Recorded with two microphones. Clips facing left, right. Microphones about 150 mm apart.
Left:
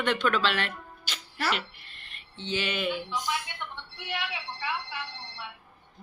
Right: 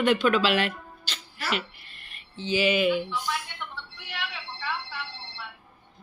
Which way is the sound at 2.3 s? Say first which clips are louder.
Right 7 dB; 5° right (ahead or behind).